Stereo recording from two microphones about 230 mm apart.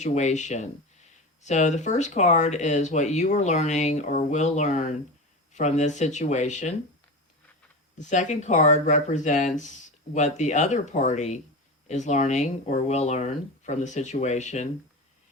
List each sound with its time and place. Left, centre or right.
0.0 s speech: left
7.9 s speech: left